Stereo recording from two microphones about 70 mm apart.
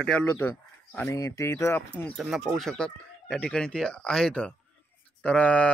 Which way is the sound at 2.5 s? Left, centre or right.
Centre.